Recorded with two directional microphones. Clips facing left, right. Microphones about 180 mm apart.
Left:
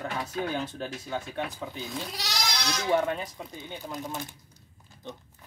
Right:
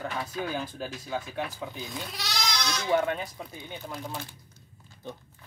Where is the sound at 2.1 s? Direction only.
40° left (ahead or behind).